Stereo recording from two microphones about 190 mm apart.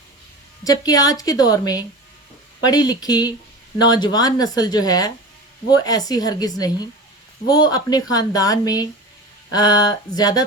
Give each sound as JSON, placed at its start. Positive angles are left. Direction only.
{"t": 0.6, "sound": "a woman's voice", "side_deg": 20}